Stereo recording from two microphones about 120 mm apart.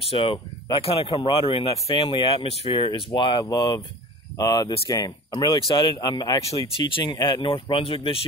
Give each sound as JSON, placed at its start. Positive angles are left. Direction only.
{"t": 0.0, "sound": "speech", "side_deg": 50}